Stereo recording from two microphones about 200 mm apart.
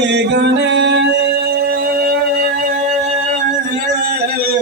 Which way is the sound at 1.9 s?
45° right (ahead or behind).